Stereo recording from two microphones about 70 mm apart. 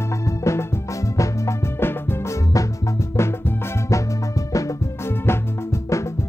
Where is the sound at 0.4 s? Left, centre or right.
Left.